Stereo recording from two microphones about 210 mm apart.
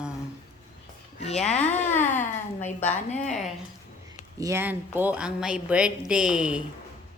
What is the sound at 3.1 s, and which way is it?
Speech, 35° left (ahead or behind).